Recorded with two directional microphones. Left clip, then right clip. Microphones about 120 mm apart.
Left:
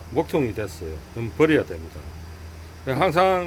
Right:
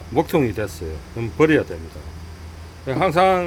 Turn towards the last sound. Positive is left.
turn(degrees=0)  # may be behind; listen again after turning